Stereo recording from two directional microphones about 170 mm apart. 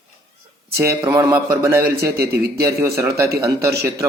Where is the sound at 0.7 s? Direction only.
15° right (ahead or behind).